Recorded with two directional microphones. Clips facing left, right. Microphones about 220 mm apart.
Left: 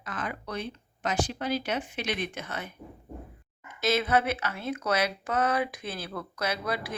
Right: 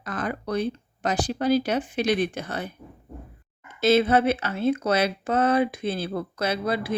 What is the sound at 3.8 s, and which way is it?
Speech, 30° right (ahead or behind).